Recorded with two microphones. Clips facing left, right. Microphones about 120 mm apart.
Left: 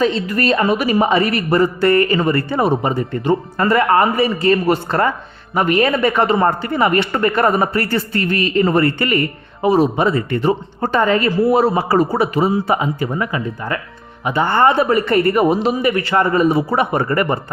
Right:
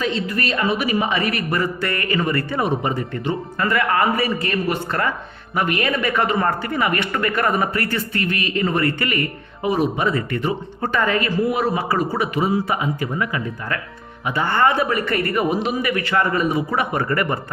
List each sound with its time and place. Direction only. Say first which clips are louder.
0.0 s a woman's voice: left 6 dB; 40° left (ahead or behind)